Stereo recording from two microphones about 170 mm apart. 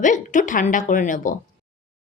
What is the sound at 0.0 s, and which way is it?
Speech, 50° left (ahead or behind).